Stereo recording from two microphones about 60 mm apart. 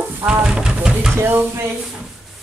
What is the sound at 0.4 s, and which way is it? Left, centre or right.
Speech, centre.